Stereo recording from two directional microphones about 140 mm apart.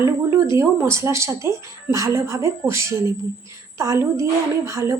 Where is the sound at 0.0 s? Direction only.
20° right (ahead or behind).